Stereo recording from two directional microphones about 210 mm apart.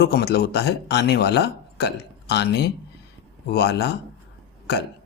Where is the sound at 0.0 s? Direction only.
50° left (ahead or behind).